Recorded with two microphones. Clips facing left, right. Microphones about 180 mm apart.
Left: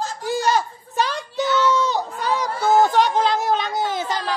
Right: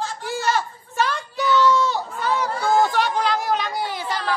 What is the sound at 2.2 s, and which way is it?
Speech, 15° left (ahead or behind).